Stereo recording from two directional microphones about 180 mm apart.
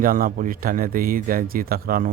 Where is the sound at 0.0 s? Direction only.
50° right (ahead or behind).